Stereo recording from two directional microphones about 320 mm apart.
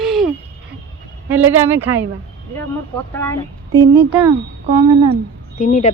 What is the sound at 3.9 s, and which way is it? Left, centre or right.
Speech, centre.